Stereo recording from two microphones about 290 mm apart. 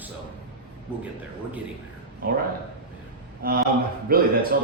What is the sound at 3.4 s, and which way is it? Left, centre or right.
Speech, right.